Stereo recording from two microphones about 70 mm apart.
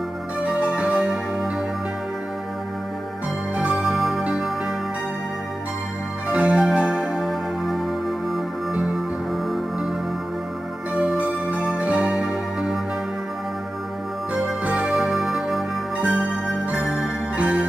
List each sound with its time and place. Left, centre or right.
0.4 s music: centre
0.9 s music: centre
3.5 s music: centre
6.2 s music: centre
11.2 s music: centre
14.3 s music: centre
17.4 s music: centre